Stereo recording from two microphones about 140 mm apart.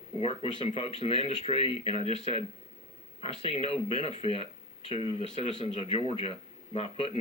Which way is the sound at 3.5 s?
45° left (ahead or behind).